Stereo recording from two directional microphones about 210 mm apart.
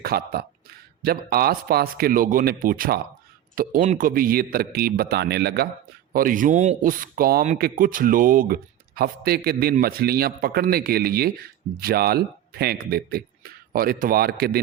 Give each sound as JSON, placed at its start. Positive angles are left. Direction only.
{"t": 0.0, "sound": "speech", "side_deg": -45}